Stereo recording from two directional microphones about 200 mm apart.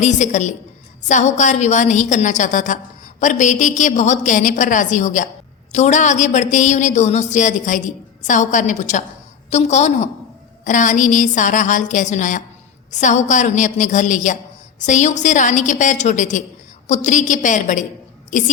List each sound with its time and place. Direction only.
0.0 s a woman's voice: 35° left (ahead or behind)